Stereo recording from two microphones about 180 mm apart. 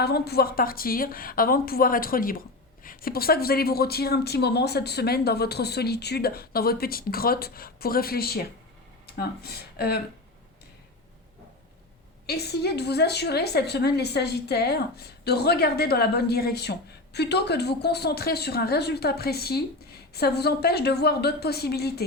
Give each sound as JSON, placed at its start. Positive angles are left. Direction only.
{"t": 0.0, "sound": "a woman's voice", "side_deg": 60}
{"t": 12.2, "sound": "a woman's voice", "side_deg": 65}